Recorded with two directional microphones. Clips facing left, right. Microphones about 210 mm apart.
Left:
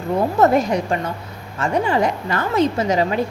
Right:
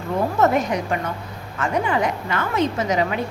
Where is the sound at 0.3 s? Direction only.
35° left (ahead or behind).